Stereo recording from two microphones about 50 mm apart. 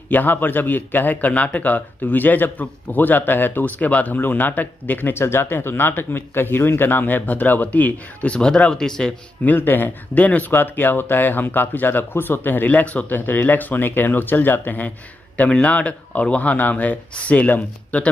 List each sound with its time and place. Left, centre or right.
0.1 s a man's voice: left
5.1 s a man's voice: left; by 9.1 s centre
9.6 s a man's voice: left
10.5 s a man's voice: left
15.3 s a man's voice: left